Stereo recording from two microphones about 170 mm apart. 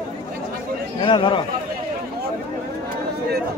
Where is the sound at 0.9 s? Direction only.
30° left (ahead or behind).